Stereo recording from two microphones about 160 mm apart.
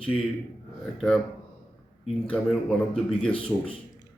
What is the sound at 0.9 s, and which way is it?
Speech, centre (ahead or behind).